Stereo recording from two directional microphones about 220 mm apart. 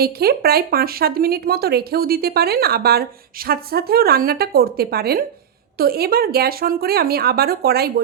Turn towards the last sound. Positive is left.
turn(degrees=-45)  # may be behind; listen again after turning